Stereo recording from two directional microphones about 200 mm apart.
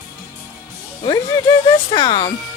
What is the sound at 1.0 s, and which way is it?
Speech, 20° left (ahead or behind).